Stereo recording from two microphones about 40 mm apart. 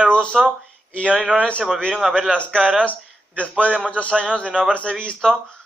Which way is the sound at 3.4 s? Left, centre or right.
Left.